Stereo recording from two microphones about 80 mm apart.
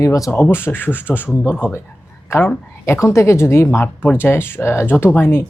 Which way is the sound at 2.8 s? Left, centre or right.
Left.